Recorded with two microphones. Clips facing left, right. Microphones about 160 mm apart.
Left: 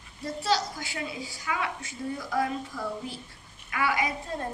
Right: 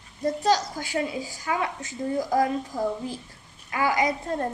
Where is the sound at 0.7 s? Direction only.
40° right (ahead or behind).